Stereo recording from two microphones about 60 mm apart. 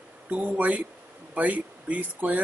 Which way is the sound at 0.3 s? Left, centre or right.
Right.